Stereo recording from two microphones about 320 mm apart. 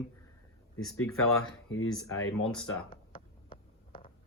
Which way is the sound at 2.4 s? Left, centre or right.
Centre.